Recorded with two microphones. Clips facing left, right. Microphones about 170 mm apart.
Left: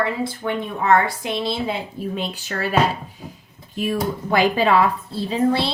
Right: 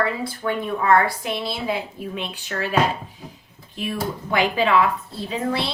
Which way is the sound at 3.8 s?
40° left (ahead or behind).